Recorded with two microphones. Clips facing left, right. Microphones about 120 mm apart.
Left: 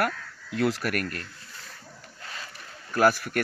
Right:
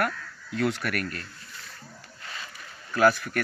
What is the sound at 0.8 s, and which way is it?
Speech, 50° left (ahead or behind).